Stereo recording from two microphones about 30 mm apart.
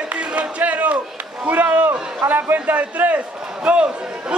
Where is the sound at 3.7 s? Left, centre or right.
Right.